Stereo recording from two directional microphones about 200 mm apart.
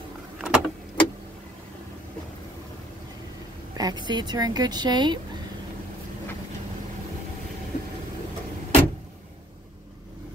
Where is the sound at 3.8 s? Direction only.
20° right (ahead or behind).